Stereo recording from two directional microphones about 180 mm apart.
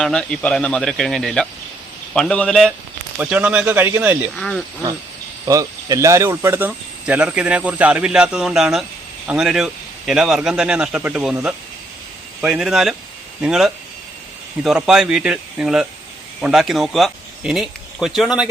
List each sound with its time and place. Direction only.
0.0 s a man's voice: 5° left (ahead or behind)
3.2 s speech: 10° right (ahead or behind)
4.4 s a man's voice: 5° left (ahead or behind)
4.8 s a man's voice: 20° right (ahead or behind); by 18.4 s 5° right (ahead or behind)